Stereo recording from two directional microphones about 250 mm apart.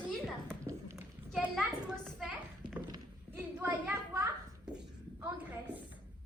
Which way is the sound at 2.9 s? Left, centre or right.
Centre.